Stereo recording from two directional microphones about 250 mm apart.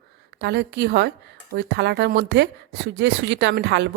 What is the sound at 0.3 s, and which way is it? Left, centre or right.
A woman's voice, right.